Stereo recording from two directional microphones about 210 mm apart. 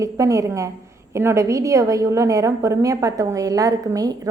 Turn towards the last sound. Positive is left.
turn(degrees=-15)  # may be behind; listen again after turning